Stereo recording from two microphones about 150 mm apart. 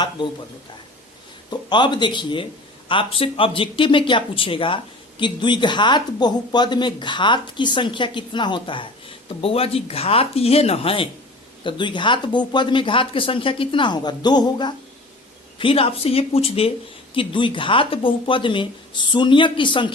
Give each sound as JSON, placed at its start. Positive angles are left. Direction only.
{"t": 1.5, "sound": "speech", "side_deg": 30}